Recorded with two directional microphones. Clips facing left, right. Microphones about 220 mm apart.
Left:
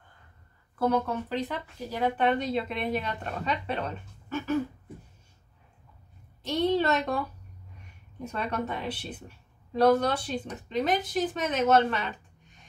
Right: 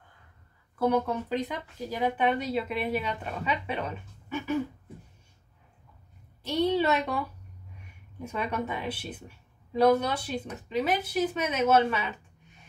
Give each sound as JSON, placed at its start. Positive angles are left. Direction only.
{"t": 0.7, "sound": "speech", "side_deg": -10}
{"t": 6.4, "sound": "speech", "side_deg": -10}